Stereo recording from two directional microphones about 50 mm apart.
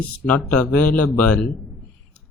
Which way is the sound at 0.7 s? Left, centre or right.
Left.